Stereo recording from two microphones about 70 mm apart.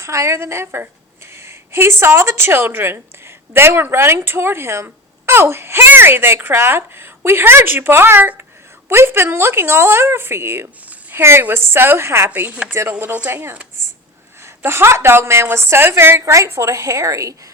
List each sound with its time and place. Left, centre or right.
0.0 s a woman's voice: right
10.8 s a sound: right
11.4 s a woman's voice: right
12.3 s a woman's voice: right